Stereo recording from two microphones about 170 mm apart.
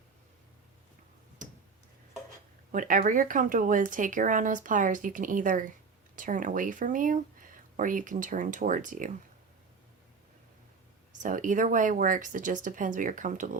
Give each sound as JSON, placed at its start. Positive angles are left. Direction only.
{"t": 2.7, "sound": "speech", "side_deg": -50}
{"t": 11.2, "sound": "speech", "side_deg": -50}